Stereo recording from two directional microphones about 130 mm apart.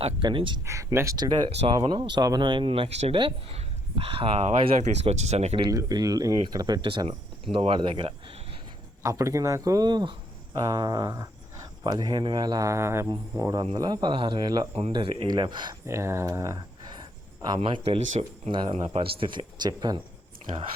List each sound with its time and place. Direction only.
0.0 s speech: 40° right (ahead or behind)
0.6 s speech: 25° right (ahead or behind)
1.5 s speech: 50° right (ahead or behind)
1.7 s speech: 35° right (ahead or behind)
4.4 s speech: 60° right (ahead or behind)
5.7 s speech: 30° right (ahead or behind)
9.0 s speech: 25° right (ahead or behind)
14.9 s speech: 45° right (ahead or behind)
15.3 s speech: 35° right (ahead or behind)
15.9 s speech: 20° right (ahead or behind)
17.5 s speech: 40° right (ahead or behind)
17.8 s speech: 50° right (ahead or behind); by 20.0 s 35° right (ahead or behind)